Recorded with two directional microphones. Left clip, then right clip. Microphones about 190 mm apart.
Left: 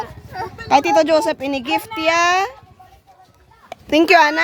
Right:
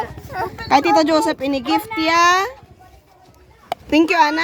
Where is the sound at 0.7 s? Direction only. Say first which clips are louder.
Left 1 dB; 20° left (ahead or behind).